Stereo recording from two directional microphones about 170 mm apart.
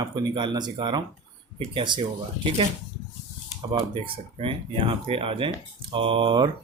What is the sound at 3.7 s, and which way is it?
Speech, 30° right (ahead or behind).